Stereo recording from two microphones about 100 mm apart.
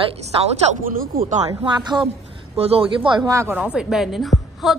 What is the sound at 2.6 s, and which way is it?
Speech, 80° right.